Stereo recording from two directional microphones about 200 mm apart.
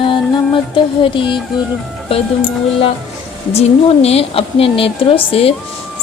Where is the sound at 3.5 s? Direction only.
30° left (ahead or behind).